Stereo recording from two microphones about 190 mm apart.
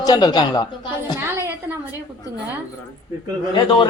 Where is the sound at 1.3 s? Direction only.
15° right (ahead or behind).